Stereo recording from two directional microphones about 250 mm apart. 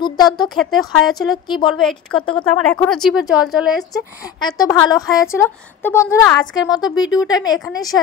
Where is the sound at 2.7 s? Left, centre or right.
Centre.